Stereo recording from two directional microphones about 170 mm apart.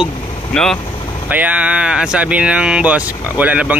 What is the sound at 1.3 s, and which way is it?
Speech, 10° right (ahead or behind).